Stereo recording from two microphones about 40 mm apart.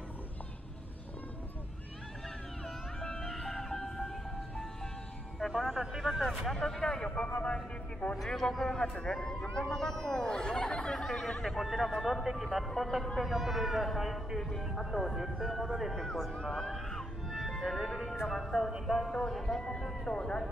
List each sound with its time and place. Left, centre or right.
3.2 s music: centre
5.4 s music: centre
5.8 s speech: centre
6.2 s a man's voice: centre
7.1 s speech: left
8.2 s a man's voice: centre
11.5 s speech: centre
13.2 s a man's voice: centre
15.9 s a man's voice: centre
16.3 s music: centre
17.5 s speech: centre
19.4 s a man's voice: centre